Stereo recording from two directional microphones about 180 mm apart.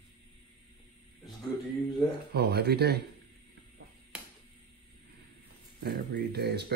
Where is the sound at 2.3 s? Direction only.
65° right (ahead or behind).